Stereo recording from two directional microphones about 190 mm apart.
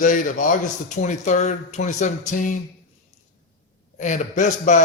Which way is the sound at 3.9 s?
40° left (ahead or behind).